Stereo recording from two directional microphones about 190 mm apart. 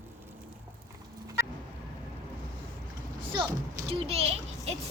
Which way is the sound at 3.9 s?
30° right (ahead or behind).